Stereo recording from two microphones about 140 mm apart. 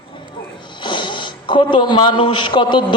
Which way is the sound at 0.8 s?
35° left (ahead or behind).